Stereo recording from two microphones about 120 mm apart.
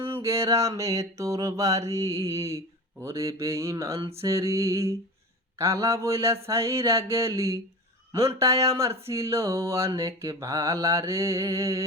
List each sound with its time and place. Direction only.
0.0 s mantra: 20° right (ahead or behind)